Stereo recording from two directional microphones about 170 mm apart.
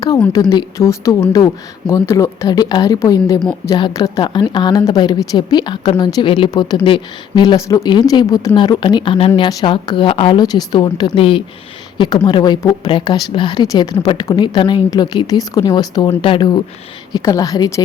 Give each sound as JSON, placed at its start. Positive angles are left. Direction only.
{"t": 0.5, "sound": "a woman's voice", "side_deg": 20}